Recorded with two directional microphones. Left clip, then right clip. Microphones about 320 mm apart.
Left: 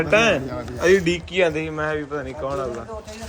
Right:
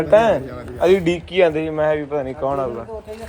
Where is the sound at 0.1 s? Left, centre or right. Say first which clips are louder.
Right 5 dB; centre.